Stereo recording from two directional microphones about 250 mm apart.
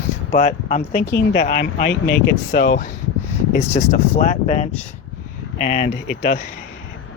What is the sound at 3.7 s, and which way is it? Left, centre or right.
Speech, left.